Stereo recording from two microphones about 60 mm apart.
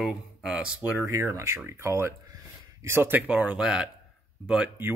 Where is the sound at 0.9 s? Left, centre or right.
Right.